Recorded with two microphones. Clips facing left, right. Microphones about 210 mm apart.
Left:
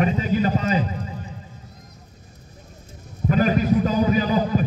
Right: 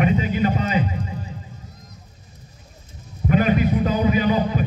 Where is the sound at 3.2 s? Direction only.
35° left (ahead or behind).